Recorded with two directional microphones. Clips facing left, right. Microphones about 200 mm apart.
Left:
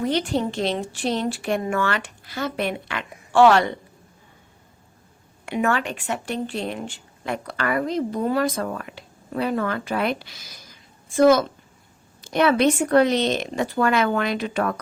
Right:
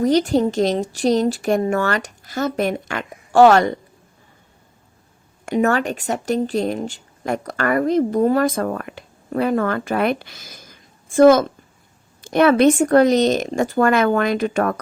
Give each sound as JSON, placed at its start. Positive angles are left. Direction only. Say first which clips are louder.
{"t": 0.0, "sound": "speech", "louder": "right 7 dB", "side_deg": -40}
{"t": 5.5, "sound": "speech", "louder": "right 5 dB", "side_deg": -40}